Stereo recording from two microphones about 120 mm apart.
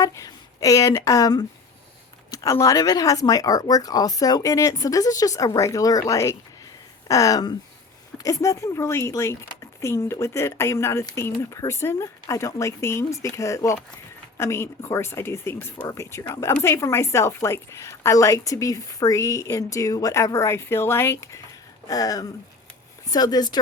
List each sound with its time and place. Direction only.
0.0 s a woman's voice: 30° left (ahead or behind)